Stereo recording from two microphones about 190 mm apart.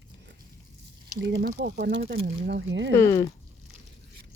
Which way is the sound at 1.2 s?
65° right (ahead or behind).